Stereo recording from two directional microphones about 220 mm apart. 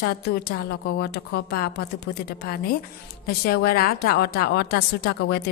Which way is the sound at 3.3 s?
45° left (ahead or behind).